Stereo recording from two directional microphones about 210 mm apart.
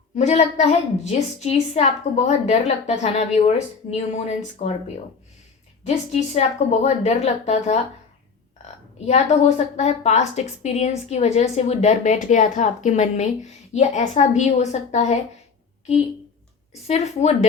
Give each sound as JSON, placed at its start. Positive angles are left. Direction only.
{"t": 0.2, "sound": "a woman's voice", "side_deg": 30}
{"t": 4.6, "sound": "speech", "side_deg": 45}
{"t": 5.8, "sound": "a woman's voice", "side_deg": 30}
{"t": 9.0, "sound": "a woman's voice", "side_deg": 30}
{"t": 16.8, "sound": "a woman's voice", "side_deg": 30}